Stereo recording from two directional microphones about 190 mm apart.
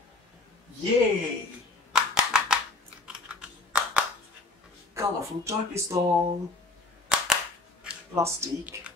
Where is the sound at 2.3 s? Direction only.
5° right (ahead or behind).